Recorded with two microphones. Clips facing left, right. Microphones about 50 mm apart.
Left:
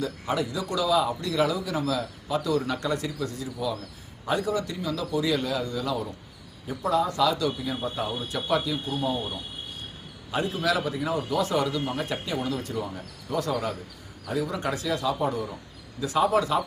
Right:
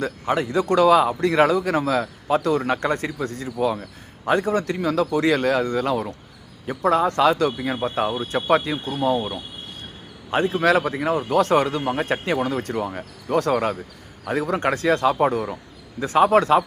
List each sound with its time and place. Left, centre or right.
0.0 s a man's voice: right
10.3 s a man's voice: right
16.0 s a man's voice: right